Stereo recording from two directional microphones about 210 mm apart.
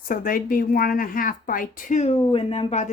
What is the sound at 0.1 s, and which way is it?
Speech, 40° left (ahead or behind).